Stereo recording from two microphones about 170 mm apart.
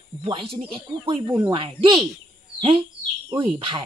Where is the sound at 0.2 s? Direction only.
35° right (ahead or behind).